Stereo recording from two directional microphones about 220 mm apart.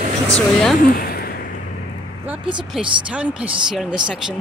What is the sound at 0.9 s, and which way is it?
Speech, 40° left (ahead or behind).